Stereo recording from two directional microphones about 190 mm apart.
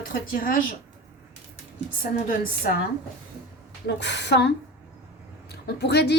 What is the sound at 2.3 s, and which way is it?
Speech, 50° left (ahead or behind).